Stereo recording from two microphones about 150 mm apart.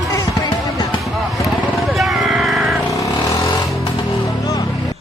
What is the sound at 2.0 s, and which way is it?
Vehicle, centre (ahead or behind).